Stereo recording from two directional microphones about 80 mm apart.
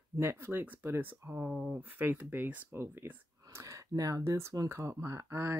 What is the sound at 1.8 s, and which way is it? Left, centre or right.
Speech, right.